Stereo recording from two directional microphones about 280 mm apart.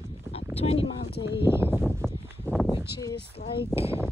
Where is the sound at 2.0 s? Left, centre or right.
Centre.